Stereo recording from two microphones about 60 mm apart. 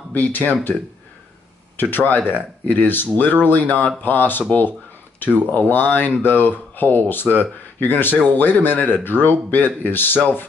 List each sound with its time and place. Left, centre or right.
0.1 s speech: left
1.8 s speech: left